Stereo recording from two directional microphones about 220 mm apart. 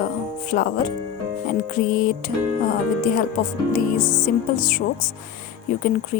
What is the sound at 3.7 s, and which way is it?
Speech, 35° left (ahead or behind).